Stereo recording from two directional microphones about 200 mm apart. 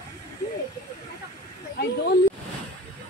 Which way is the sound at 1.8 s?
55° left (ahead or behind).